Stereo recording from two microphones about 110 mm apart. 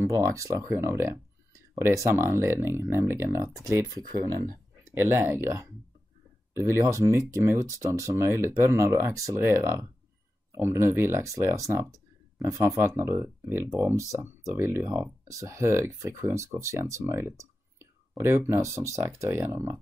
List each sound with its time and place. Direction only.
0.1 s speech: 30° right (ahead or behind)
4.9 s speech: 20° right (ahead or behind)